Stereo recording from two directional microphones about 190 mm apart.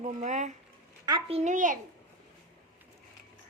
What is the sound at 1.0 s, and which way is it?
Speech, 25° right (ahead or behind).